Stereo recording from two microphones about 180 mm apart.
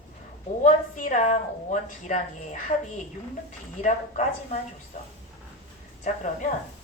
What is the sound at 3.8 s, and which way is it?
A woman's voice, 45° left (ahead or behind).